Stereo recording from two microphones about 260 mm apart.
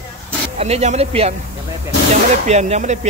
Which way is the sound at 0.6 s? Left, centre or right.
Right.